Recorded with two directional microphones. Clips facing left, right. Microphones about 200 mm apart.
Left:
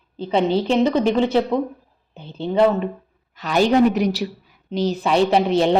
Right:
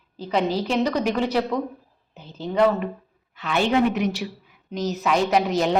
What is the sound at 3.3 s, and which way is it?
A woman's voice, 40° left (ahead or behind).